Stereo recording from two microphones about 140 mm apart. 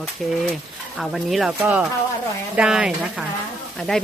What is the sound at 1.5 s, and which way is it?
Speech, 15° right (ahead or behind).